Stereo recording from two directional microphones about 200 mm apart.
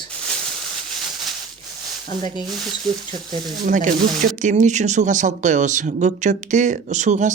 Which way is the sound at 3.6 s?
40° right (ahead or behind).